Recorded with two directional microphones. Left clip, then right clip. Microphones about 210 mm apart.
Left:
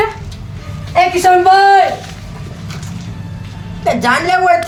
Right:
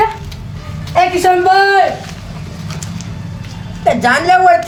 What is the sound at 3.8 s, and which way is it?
Speech, 10° left (ahead or behind).